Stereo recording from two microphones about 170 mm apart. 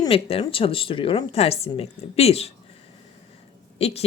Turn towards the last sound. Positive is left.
turn(degrees=40)  # may be behind; listen again after turning